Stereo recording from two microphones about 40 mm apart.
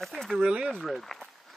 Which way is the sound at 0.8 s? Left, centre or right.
Centre.